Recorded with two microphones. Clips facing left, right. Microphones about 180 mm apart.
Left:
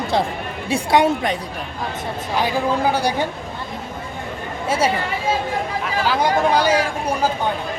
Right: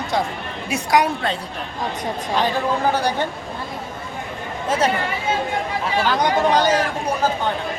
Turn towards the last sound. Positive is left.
turn(degrees=10)  # may be behind; listen again after turning